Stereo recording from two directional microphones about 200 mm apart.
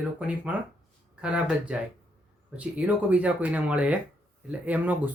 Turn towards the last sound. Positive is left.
turn(degrees=-10)  # may be behind; listen again after turning